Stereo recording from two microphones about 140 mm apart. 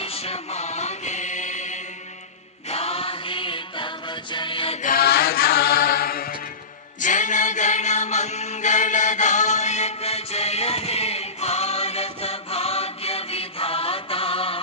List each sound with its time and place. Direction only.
0.0 s music: 45° left (ahead or behind)
2.6 s music: 45° left (ahead or behind)
4.8 s mantra: 85° left
7.0 s chant: 60° left (ahead or behind); by 14.6 s 40° left (ahead or behind)